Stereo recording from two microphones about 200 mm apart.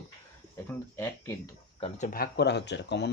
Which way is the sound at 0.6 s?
10° left (ahead or behind).